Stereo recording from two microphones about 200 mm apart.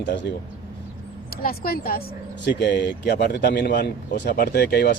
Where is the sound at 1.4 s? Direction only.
50° left (ahead or behind).